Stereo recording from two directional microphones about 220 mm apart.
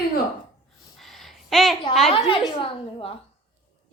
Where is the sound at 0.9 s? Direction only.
Centre (ahead or behind).